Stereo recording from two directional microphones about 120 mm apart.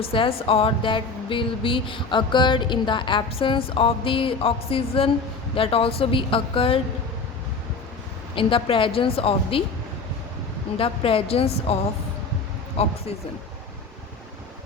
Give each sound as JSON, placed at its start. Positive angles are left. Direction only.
{"t": 0.0, "sound": "a woman's voice", "side_deg": 50}
{"t": 8.4, "sound": "a woman's voice", "side_deg": 45}
{"t": 10.8, "sound": "a woman's voice", "side_deg": 50}